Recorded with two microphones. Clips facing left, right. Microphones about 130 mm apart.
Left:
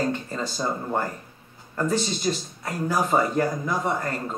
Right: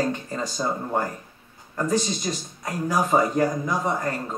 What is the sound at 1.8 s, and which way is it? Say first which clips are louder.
Speech: right 1 dB; 15° right (ahead or behind).